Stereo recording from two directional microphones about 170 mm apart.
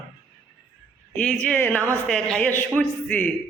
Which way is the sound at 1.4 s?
10° left (ahead or behind).